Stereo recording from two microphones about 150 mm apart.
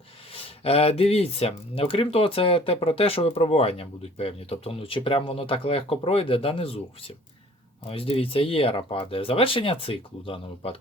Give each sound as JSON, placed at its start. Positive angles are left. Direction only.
{"t": 0.3, "sound": "speech", "side_deg": 40}
{"t": 7.9, "sound": "speech", "side_deg": 40}